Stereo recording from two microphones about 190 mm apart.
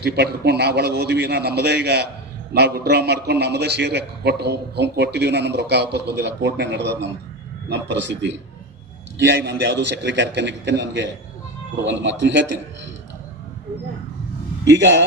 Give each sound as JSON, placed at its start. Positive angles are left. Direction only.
{"t": 0.0, "sound": "a man's voice", "side_deg": -60}
{"t": 14.7, "sound": "a man's voice", "side_deg": -65}